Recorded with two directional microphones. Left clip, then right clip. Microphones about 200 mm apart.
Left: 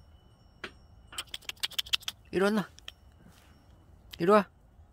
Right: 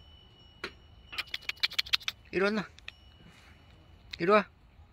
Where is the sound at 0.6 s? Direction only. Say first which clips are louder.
Right 2 dB; 60° right (ahead or behind).